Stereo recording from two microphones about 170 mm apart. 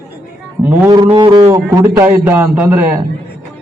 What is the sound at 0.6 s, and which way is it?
Speech, 10° right (ahead or behind).